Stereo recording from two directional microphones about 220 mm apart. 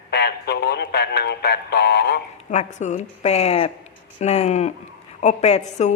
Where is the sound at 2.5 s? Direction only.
35° left (ahead or behind).